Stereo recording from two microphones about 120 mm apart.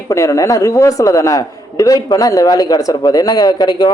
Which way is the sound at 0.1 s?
25° left (ahead or behind).